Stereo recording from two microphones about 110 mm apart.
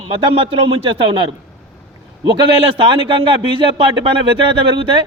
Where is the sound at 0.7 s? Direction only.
50° right (ahead or behind).